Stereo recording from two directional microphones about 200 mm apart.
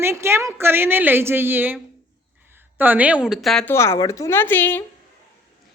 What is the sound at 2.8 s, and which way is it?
Speech, 10° right (ahead or behind).